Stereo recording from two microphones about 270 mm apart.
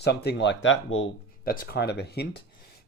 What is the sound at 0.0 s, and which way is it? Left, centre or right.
Speech, left.